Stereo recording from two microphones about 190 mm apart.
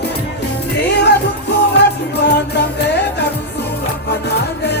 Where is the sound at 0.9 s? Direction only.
60° left (ahead or behind).